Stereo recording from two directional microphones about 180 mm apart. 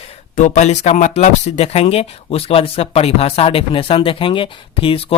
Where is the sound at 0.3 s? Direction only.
40° left (ahead or behind).